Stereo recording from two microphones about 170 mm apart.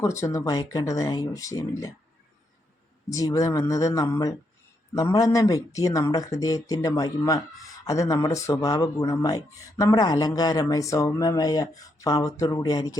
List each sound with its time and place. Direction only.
0.0 s speech: 15° left (ahead or behind)
3.1 s speech: 20° left (ahead or behind)